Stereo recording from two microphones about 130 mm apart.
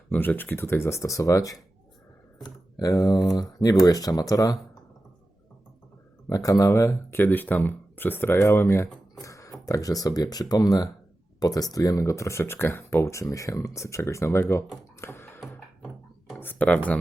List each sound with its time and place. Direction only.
0.1 s speech: 15° left (ahead or behind)
6.2 s speech: 25° left (ahead or behind)
15.0 s music: 20° left (ahead or behind)
16.4 s speech: 15° left (ahead or behind)